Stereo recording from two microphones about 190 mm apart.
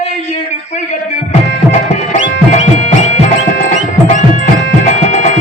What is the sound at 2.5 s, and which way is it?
Music, 35° left (ahead or behind).